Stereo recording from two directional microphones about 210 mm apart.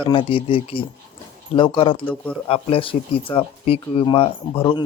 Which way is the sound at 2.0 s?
5° left (ahead or behind).